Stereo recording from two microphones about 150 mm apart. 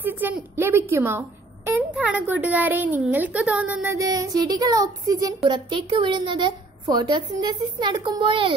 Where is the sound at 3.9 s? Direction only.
25° right (ahead or behind).